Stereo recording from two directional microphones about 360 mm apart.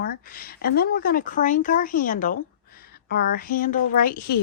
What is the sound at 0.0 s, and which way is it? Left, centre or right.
Speech, left.